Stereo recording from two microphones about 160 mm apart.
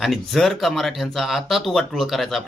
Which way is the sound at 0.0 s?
Centre (ahead or behind).